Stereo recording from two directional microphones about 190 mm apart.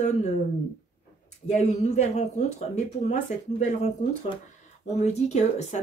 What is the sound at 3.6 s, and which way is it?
Speech, 35° left (ahead or behind).